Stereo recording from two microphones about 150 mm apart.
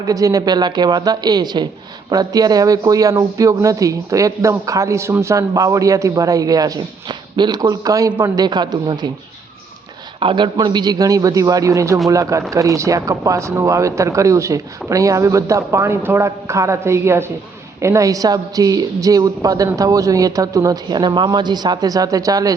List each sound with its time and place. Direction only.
0.0 s a man's voice: 25° right (ahead or behind)
10.2 s a man's voice: 35° right (ahead or behind)